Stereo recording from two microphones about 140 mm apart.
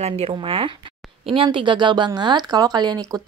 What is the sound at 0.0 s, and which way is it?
Speech, 45° right (ahead or behind).